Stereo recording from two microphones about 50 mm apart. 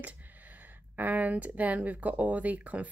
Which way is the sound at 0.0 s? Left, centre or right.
Right.